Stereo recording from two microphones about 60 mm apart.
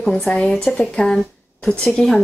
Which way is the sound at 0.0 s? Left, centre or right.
Centre.